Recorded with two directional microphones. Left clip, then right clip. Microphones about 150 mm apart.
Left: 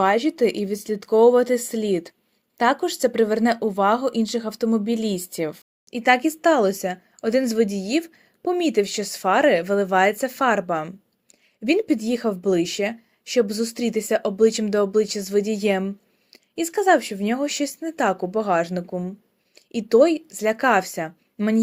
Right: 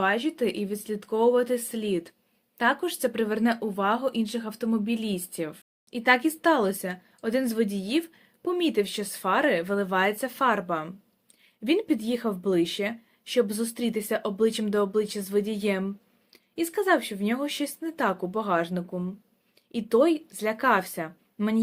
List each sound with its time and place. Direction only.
0.0 s speech: 45° left (ahead or behind)
5.9 s speech: 35° left (ahead or behind)